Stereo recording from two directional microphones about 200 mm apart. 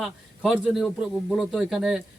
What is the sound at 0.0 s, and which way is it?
A man's voice, 5° right (ahead or behind).